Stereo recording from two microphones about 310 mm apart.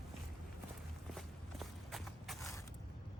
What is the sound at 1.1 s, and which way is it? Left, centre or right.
Walk, centre.